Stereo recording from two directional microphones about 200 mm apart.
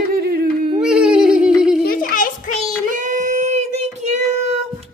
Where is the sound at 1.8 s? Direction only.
45° left (ahead or behind).